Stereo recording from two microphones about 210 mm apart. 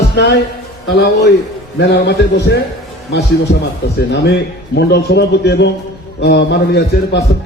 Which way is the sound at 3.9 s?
55° left (ahead or behind).